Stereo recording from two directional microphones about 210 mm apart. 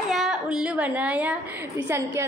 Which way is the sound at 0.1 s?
Centre (ahead or behind).